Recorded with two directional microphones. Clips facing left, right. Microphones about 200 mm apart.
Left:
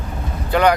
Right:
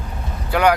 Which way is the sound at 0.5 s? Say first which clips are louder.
Left 1 dB; 10° right (ahead or behind).